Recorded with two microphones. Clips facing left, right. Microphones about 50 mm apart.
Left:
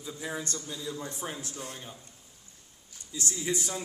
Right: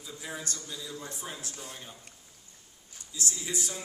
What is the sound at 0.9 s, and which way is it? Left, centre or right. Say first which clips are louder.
Speech: left 3 dB; left.